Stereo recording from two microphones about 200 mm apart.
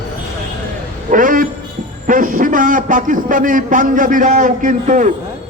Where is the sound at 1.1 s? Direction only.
40° right (ahead or behind).